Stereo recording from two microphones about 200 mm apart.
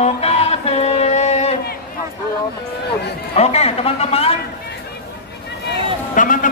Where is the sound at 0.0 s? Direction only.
30° left (ahead or behind).